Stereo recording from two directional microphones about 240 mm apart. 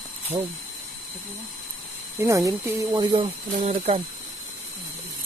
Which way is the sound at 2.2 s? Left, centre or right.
Centre.